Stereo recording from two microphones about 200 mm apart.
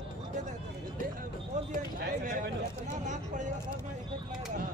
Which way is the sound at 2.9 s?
35° right (ahead or behind).